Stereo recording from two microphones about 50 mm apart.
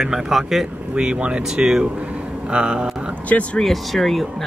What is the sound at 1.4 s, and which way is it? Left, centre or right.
Speech, centre.